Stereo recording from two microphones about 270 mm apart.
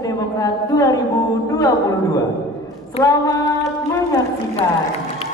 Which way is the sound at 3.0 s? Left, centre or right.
Centre.